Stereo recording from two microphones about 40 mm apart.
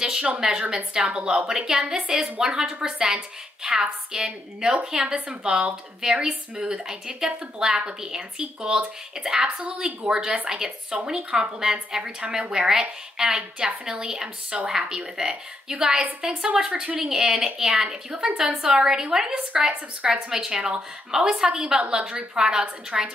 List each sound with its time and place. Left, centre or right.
0.0 s a woman's voice: centre